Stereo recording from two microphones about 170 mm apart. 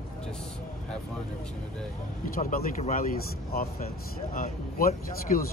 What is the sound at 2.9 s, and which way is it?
Speech, 55° left (ahead or behind).